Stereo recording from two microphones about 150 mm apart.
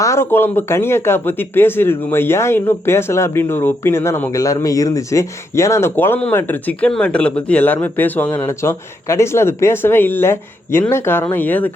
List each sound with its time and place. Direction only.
0.0 s speech: 20° left (ahead or behind)